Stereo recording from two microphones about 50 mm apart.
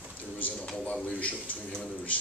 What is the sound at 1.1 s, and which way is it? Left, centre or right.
Speech, left.